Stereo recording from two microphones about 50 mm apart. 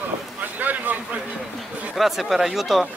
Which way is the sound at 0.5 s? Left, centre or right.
Right.